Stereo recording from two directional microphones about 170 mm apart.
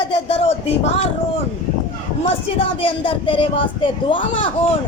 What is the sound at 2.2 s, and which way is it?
Speech, 35° left (ahead or behind).